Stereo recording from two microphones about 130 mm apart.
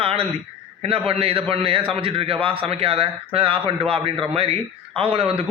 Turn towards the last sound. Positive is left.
turn(degrees=-45)  # may be behind; listen again after turning